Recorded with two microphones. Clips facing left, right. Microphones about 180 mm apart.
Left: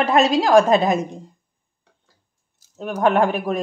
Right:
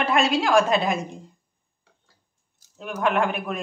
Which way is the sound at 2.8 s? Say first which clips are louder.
Left 5 dB; 40° left (ahead or behind).